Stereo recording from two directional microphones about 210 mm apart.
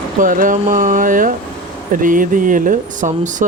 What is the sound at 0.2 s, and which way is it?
Speech, 40° right (ahead or behind).